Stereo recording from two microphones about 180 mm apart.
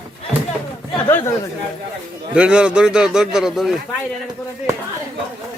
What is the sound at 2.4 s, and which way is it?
A man's voice, 5° right (ahead or behind).